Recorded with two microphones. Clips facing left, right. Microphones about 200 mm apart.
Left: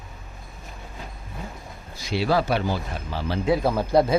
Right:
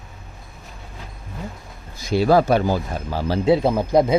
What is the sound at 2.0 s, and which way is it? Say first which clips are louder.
Speech: right 6 dB; 45° right (ahead or behind).